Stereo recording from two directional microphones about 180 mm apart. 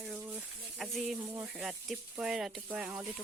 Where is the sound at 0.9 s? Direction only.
10° right (ahead or behind).